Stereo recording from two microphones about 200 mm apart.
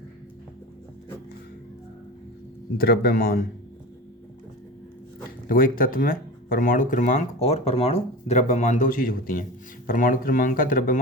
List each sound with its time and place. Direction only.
2.7 s speech: 50° left (ahead or behind)
5.5 s speech: 45° left (ahead or behind)